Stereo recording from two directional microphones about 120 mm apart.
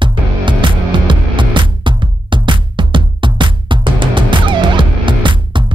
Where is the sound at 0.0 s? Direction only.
45° right (ahead or behind).